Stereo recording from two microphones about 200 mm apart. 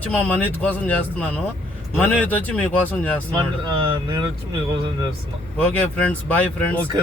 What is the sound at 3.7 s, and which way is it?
Speech, 20° right (ahead or behind).